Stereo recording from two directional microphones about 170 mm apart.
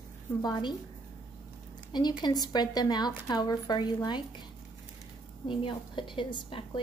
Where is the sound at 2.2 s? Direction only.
25° left (ahead or behind).